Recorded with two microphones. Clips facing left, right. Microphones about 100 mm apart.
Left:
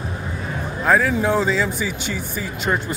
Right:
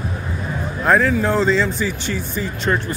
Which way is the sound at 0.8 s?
Centre (ahead or behind).